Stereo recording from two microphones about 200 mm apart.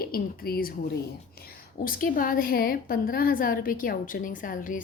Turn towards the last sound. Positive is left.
turn(degrees=40)  # may be behind; listen again after turning